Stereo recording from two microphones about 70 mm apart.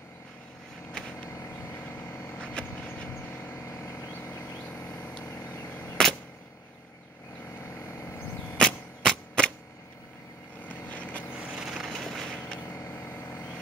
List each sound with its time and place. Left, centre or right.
0.9 s vehicle: centre
2.3 s vehicle: centre
2.9 s vehicle: left
3.6 s vehicle: left
7.6 s vehicle: left
8.5 s a sound: centre
10.7 s vehicle: left
11.3 s vehicle: centre
11.9 s vehicle: centre
12.8 s vehicle: left